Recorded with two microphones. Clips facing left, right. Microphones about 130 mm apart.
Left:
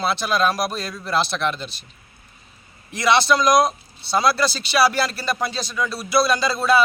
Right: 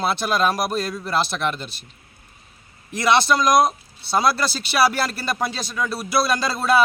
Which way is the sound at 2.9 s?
50° right (ahead or behind).